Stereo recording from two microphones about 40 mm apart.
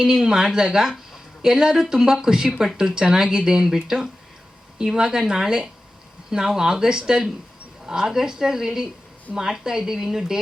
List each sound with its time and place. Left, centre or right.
0.0 s speech: centre